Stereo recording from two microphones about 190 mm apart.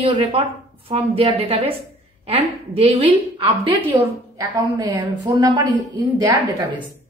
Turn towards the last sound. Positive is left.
turn(degrees=-20)  # may be behind; listen again after turning